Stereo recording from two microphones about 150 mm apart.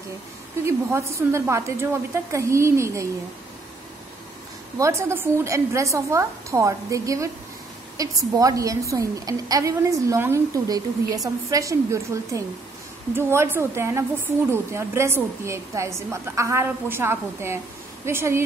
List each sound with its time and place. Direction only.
0.7 s a woman's voice: 20° right (ahead or behind)
4.7 s a woman's voice: 20° right (ahead or behind)